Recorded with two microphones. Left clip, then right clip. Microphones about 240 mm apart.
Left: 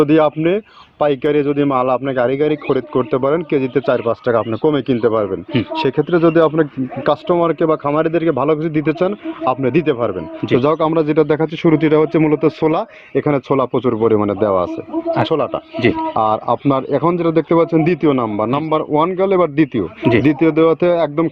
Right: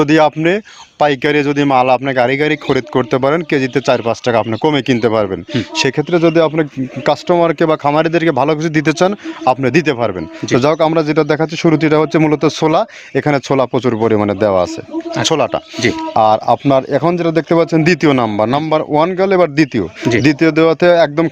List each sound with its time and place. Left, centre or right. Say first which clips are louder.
0.0 s speech: right 2 dB; right